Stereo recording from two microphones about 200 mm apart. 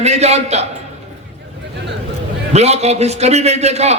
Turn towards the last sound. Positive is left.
turn(degrees=-35)  # may be behind; listen again after turning